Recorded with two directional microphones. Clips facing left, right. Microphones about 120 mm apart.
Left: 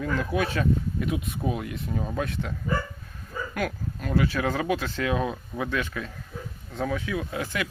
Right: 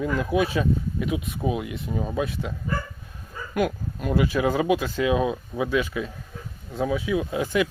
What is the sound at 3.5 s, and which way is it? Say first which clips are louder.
Speech: right 7 dB; 20° right (ahead or behind).